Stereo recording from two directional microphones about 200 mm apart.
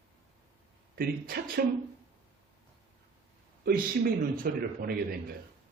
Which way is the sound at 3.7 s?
45° right (ahead or behind).